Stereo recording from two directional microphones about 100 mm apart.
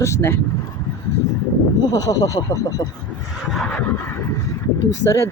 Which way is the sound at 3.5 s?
Centre (ahead or behind).